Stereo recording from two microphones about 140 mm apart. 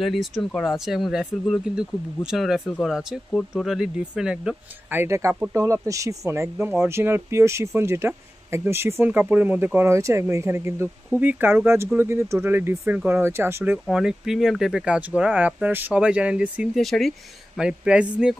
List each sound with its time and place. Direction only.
0.0 s speech: centre (ahead or behind)
4.9 s speech: 20° right (ahead or behind)
13.8 s speech: 5° right (ahead or behind)